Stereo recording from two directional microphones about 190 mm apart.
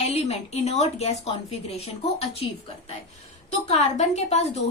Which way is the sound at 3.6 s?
35° left (ahead or behind).